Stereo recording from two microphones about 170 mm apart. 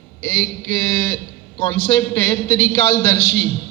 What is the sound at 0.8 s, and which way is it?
A man's voice, 30° left (ahead or behind).